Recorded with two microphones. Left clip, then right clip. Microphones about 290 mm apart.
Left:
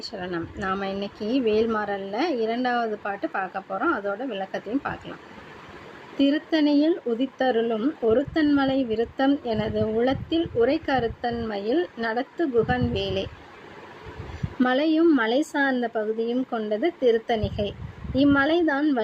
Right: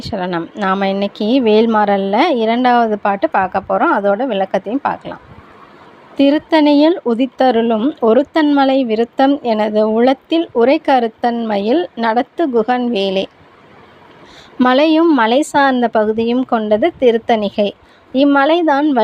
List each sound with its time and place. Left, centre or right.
0.0 s speech: right
6.1 s speech: right
14.6 s speech: right